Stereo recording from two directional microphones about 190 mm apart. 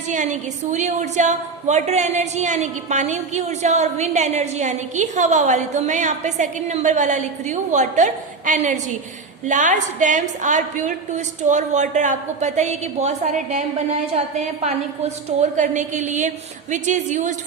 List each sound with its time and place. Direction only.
0.1 s a woman's voice: 40° right (ahead or behind)